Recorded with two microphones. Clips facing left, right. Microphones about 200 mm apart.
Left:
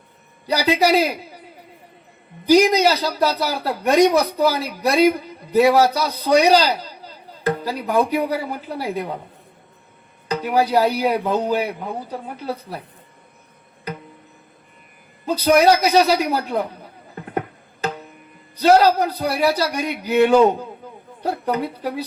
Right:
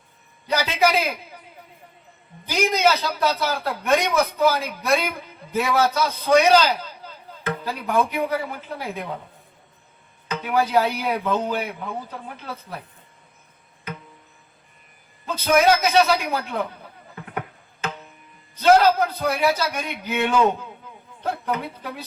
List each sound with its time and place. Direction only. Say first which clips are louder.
0.4 s a man's voice: left 3 dB; 35° left (ahead or behind)
2.5 s a man's voice: left 6 dB; 35° left (ahead or behind)
10.2 s a man's voice: left 4 dB; 35° left (ahead or behind)
15.3 s a man's voice: left 4 dB; 35° left (ahead or behind)
17.3 s music: left 6 dB; 40° left (ahead or behind)
18.5 s a man's voice: left 2 dB; 35° left (ahead or behind)